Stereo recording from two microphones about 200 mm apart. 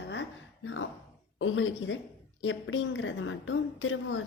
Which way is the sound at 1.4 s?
80° left.